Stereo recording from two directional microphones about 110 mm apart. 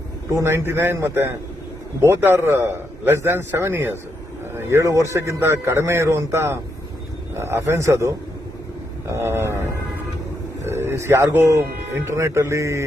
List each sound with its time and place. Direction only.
0.3 s speech: 25° right (ahead or behind)
9.1 s speech: 20° right (ahead or behind)
10.7 s speech: 20° right (ahead or behind)